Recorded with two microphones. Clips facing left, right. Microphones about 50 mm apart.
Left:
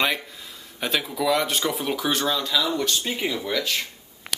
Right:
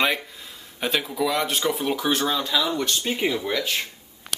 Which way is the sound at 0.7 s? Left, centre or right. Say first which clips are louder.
Right 1 dB; centre.